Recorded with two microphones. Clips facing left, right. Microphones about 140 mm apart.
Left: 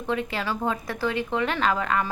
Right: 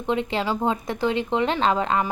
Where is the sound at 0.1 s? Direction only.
25° right (ahead or behind).